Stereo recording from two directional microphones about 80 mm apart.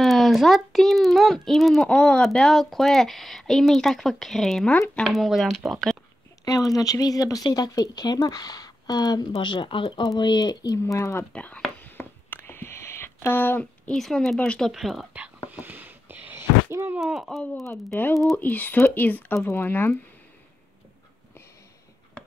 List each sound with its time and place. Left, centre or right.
0.0 s a child's voice: centre
6.4 s speech: left
10.0 s speech: left
11.3 s a sound: centre
12.0 s a sound: left
13.9 s a child's voice: centre
15.5 s a sound: centre
16.7 s speech: right
17.0 s a child's voice: centre
18.3 s speech: left